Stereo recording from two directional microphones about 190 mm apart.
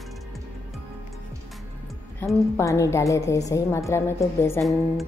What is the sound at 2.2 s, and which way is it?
A woman's voice, 15° left (ahead or behind).